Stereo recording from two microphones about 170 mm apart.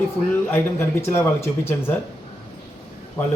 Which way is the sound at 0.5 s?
15° left (ahead or behind).